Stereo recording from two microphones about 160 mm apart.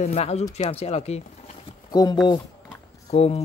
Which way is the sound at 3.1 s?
40° left (ahead or behind).